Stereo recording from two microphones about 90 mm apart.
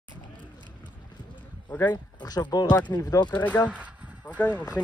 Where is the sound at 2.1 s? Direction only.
50° left (ahead or behind).